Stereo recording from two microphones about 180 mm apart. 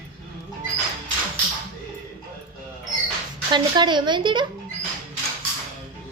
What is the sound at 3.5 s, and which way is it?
Speech, 25° right (ahead or behind).